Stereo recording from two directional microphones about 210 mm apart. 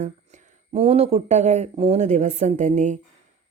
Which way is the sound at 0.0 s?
35° right (ahead or behind).